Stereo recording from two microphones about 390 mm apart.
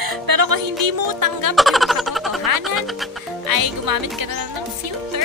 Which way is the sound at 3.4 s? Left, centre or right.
Right.